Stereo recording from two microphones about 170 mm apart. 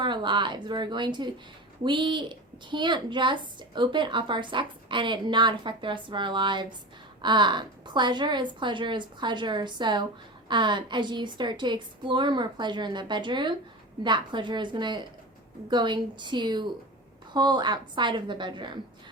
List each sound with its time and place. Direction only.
0.0 s a woman's voice: 25° right (ahead or behind)